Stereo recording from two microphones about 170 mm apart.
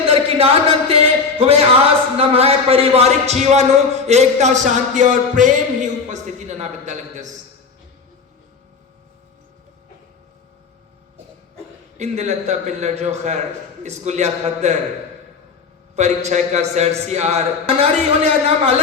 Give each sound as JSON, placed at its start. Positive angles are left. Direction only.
{"t": 0.0, "sound": "a sound", "side_deg": -35}
{"t": 2.1, "sound": "a man's voice", "side_deg": -35}
{"t": 11.9, "sound": "a man's voice", "side_deg": -40}
{"t": 16.0, "sound": "a man's voice", "side_deg": -40}